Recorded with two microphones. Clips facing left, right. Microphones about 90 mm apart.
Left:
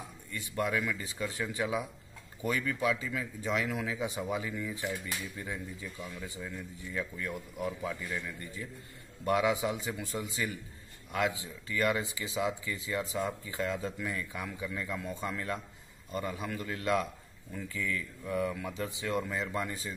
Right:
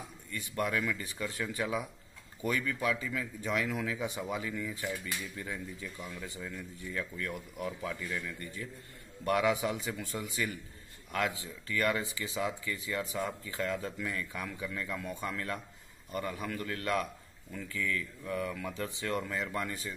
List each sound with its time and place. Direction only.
0.6 s a man's voice: 15° left (ahead or behind)